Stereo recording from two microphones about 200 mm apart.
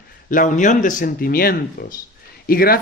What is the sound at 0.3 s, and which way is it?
Speech, 40° left (ahead or behind).